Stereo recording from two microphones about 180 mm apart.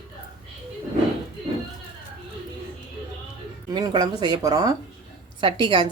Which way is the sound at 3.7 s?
20° right (ahead or behind).